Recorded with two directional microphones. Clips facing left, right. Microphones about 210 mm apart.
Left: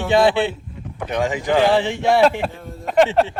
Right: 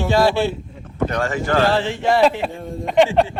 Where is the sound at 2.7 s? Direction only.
Centre (ahead or behind).